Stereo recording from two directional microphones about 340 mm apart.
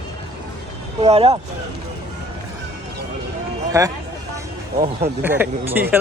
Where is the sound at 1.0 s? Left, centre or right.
Centre.